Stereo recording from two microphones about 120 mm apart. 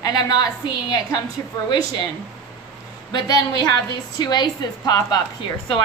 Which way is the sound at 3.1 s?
35° left (ahead or behind).